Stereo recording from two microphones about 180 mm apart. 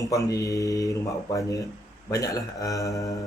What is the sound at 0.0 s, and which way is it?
A man's voice, 20° left (ahead or behind).